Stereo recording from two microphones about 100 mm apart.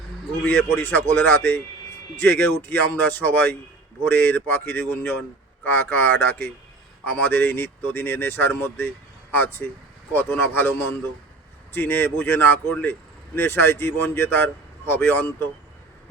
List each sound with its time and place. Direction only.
0.4 s speech: 20° left (ahead or behind)